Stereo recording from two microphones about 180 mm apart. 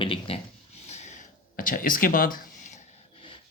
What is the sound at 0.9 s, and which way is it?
Speech, 40° left (ahead or behind).